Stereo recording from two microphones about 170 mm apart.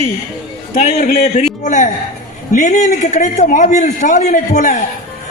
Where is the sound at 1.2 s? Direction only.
45° left (ahead or behind).